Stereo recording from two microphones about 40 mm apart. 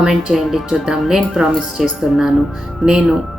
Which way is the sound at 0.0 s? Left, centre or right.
Centre.